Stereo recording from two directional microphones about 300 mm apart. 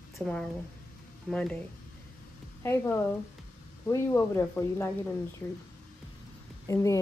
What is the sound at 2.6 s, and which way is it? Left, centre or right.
Speech, centre.